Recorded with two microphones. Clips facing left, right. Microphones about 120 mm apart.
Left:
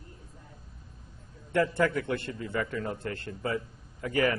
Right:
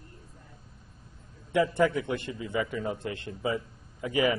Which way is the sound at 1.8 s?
10° right (ahead or behind).